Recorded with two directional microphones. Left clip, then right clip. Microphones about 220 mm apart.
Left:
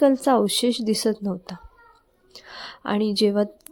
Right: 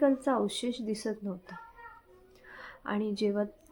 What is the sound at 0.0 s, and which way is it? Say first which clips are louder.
Speech: left 9 dB; 45° left (ahead or behind).